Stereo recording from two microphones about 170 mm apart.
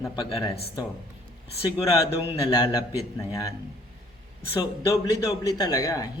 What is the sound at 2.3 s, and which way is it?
Speech, 25° left (ahead or behind).